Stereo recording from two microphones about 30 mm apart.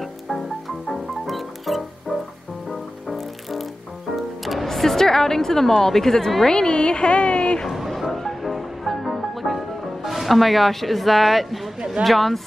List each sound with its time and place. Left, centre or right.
0.0 s music: centre
4.7 s a woman's voice: centre
6.4 s speech: left
7.6 s music: centre
8.1 s music: centre
10.0 s speech: centre